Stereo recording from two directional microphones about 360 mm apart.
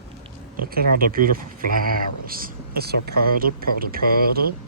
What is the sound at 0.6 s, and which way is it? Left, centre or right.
A woman's voice, right.